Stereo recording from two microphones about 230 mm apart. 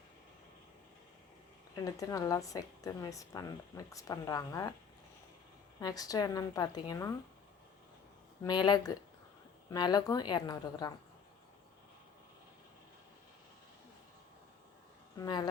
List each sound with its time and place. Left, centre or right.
1.7 s a woman's voice: centre
5.8 s a woman's voice: centre
8.4 s a woman's voice: centre
15.2 s a woman's voice: centre